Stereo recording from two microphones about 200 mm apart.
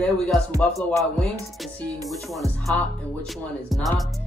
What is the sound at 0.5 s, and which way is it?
Music, 5° left (ahead or behind).